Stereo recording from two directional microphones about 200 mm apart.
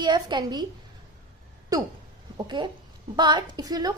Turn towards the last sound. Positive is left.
turn(degrees=-20)  # may be behind; listen again after turning